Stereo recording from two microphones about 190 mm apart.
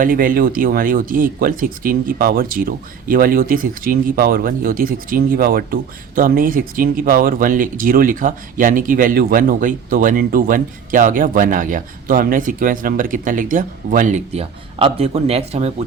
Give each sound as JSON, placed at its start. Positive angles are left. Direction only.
{"t": 0.0, "sound": "speech", "side_deg": -45}